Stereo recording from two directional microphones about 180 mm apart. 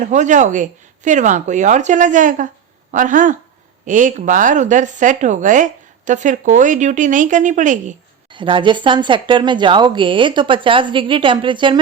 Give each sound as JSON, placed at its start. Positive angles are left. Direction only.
{"t": 0.0, "sound": "speech", "side_deg": -45}
{"t": 8.3, "sound": "speech", "side_deg": -25}